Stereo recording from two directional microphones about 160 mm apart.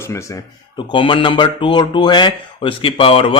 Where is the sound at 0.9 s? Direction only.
30° left (ahead or behind).